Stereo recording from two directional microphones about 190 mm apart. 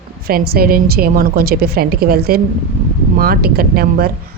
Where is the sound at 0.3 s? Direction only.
55° right (ahead or behind).